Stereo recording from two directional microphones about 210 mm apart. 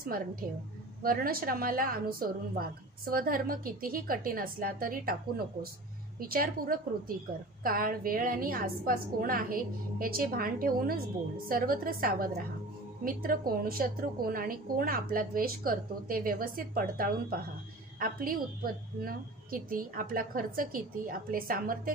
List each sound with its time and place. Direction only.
0.0 s a woman's voice: 45° right (ahead or behind)
6.1 s a woman's voice: 45° right (ahead or behind)